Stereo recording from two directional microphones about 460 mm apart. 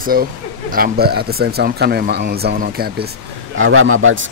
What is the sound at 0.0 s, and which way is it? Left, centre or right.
Speech, centre.